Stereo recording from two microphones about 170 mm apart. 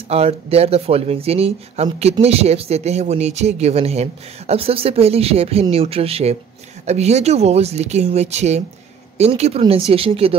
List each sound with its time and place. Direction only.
0.1 s speech: 35° right (ahead or behind)